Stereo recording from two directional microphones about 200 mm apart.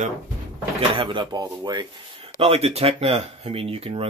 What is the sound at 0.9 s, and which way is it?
Speech, 25° right (ahead or behind).